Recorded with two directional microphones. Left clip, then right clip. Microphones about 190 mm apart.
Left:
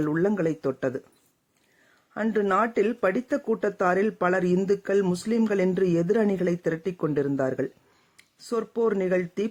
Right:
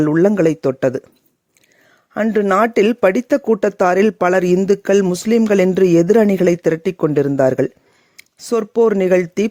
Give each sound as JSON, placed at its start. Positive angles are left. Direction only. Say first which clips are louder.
{"t": 0.0, "sound": "speech", "louder": "right 11 dB", "side_deg": -45}
{"t": 2.1, "sound": "speech", "louder": "right 9 dB", "side_deg": -40}